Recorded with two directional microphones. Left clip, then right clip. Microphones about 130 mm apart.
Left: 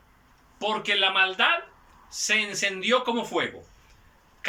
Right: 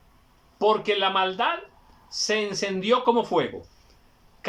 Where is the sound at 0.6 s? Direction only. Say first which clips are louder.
Right 2 dB; 45° right (ahead or behind).